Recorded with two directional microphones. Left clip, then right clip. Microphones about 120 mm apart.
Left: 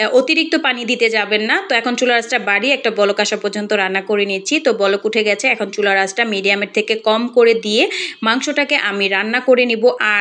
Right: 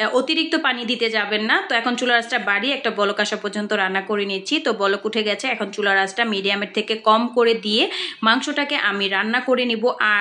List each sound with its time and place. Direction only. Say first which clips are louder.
0.0 s a woman's voice: left 6 dB; 25° left (ahead or behind)